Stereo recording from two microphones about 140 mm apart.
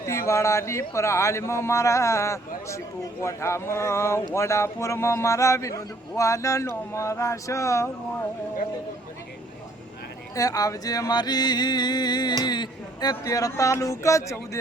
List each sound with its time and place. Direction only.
0.0 s speech: 20° left (ahead or behind)
10.3 s speech: 25° left (ahead or behind)